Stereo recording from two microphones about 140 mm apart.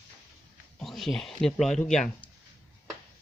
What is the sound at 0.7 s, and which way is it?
Speech, centre (ahead or behind).